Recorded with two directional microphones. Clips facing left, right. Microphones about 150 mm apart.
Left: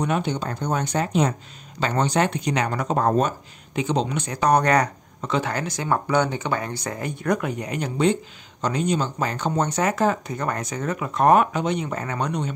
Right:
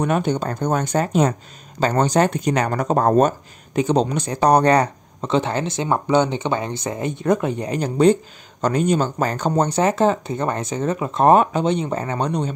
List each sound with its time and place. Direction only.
0.0 s speech: 45° right (ahead or behind)